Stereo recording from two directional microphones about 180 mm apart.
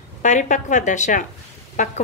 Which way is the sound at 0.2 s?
45° left (ahead or behind).